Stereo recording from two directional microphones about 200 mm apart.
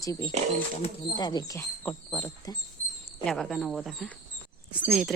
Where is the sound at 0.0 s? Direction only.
15° left (ahead or behind).